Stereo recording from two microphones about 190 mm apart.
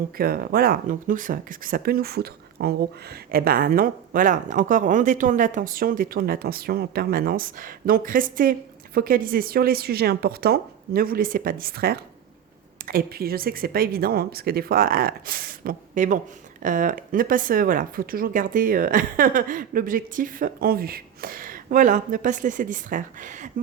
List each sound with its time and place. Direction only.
0.2 s speech: 50° right (ahead or behind)